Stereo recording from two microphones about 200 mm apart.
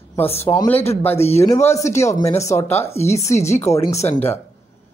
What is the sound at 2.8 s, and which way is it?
Speech, 30° left (ahead or behind).